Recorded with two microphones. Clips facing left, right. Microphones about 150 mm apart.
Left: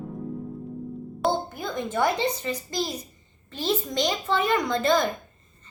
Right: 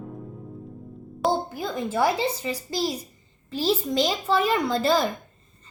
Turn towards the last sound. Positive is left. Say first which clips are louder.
# right 1 dB
turn(degrees=-5)  # may be behind; listen again after turning